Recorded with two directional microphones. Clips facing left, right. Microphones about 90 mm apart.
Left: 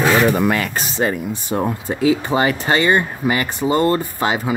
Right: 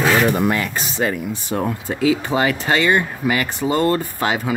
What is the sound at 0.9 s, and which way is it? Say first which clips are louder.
Speech: left 1 dB; 30° left (ahead or behind).